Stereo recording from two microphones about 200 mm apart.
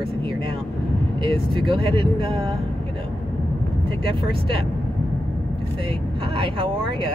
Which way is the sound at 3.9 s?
25° right (ahead or behind).